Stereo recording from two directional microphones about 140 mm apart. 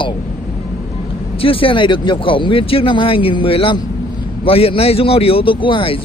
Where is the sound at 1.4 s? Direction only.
40° left (ahead or behind).